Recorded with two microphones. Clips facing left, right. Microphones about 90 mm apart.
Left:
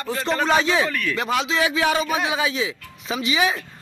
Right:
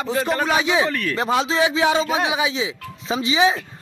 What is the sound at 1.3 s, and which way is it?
A man's voice, 25° right (ahead or behind).